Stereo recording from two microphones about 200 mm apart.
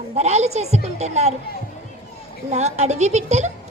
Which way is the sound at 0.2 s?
35° right (ahead or behind).